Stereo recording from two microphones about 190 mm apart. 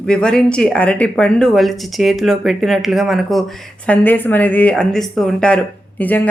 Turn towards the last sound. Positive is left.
turn(degrees=10)  # may be behind; listen again after turning